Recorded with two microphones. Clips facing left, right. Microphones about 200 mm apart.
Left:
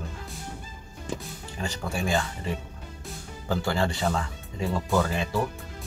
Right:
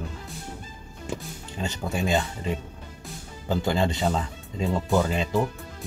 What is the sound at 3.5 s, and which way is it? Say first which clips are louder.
Speech: right 2 dB; 20° right (ahead or behind).